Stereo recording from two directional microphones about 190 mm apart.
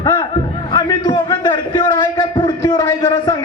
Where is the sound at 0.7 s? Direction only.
20° left (ahead or behind).